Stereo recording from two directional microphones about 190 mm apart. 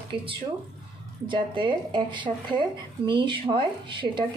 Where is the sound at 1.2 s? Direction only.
25° right (ahead or behind).